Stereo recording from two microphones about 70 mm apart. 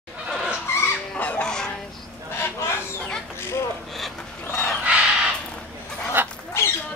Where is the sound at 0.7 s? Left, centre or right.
Left.